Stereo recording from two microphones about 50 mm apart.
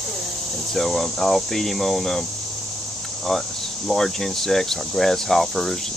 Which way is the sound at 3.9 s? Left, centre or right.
Centre.